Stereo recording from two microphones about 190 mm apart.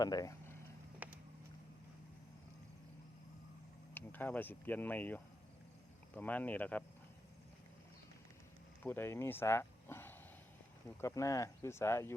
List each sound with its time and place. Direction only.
0.0 s speech: 20° left (ahead or behind)
1.0 s vehicle: 10° right (ahead or behind)
3.9 s speech: 10° left (ahead or behind)
8.8 s speech: 10° left (ahead or behind)